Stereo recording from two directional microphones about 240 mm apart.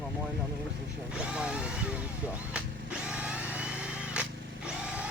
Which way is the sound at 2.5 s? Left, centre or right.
Centre.